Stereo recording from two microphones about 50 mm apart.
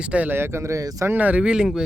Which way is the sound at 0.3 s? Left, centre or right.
Right.